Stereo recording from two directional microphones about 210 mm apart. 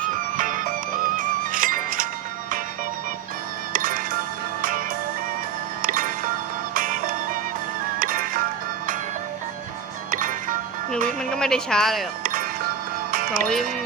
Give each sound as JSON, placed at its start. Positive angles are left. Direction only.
{"t": 0.3, "sound": "music", "side_deg": -40}
{"t": 3.7, "sound": "music", "side_deg": -40}
{"t": 5.8, "sound": "music", "side_deg": -40}
{"t": 10.1, "sound": "music", "side_deg": -40}
{"t": 11.2, "sound": "speech", "side_deg": 5}
{"t": 12.2, "sound": "music", "side_deg": -45}